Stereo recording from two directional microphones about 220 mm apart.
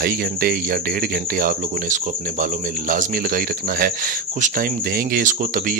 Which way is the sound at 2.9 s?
40° right (ahead or behind).